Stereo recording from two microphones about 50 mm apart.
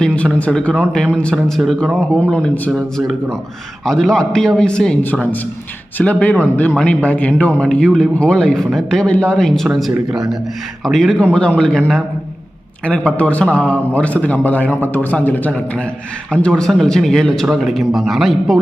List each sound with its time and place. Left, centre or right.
0.6 s speech: centre
3.8 s speech: centre
6.0 s a man's voice: left; by 9.0 s centre
9.0 s speech: left
10.1 s speech: centre
10.8 s a man's voice: centre
11.1 s a man's voice: left
16.3 s speech: centre
17.5 s a man's voice: centre